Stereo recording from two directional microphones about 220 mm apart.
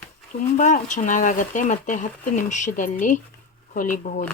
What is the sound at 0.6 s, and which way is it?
Speech, 35° left (ahead or behind).